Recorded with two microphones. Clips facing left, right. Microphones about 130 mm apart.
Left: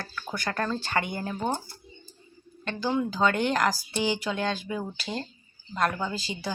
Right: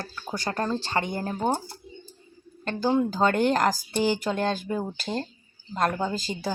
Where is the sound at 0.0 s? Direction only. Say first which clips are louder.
Right 1 dB; 20° right (ahead or behind).